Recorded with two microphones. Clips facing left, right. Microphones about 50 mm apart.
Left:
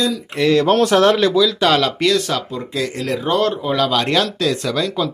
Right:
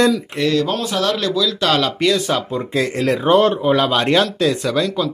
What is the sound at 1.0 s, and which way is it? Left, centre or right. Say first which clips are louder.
Speech: left 5 dB; left.